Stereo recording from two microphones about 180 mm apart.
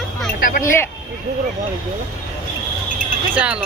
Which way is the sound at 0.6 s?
15° left (ahead or behind).